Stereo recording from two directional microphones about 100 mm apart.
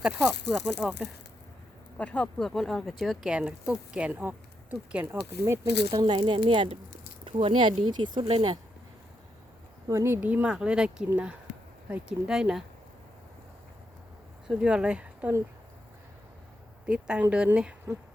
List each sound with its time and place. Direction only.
0.0 s speech: 15° right (ahead or behind)
0.3 s speech: 5° left (ahead or behind)
2.0 s speech: 15° left (ahead or behind)
3.3 s speech: 10° right (ahead or behind)
5.0 s speech: 25° right (ahead or behind)
5.9 s speech: 50° right (ahead or behind)
9.9 s speech: 25° right (ahead or behind)
10.2 s speech: 15° right (ahead or behind)
14.4 s speech: 10° right (ahead or behind)
16.8 s speech: 10° right (ahead or behind)